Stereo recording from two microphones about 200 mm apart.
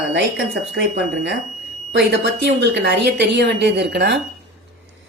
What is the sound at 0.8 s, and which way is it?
A woman's voice, 60° right (ahead or behind).